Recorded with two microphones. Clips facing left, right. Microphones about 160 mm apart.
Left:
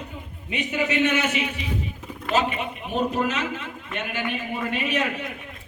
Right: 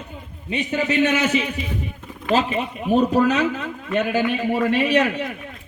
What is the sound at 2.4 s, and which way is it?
A man's voice, 35° right (ahead or behind).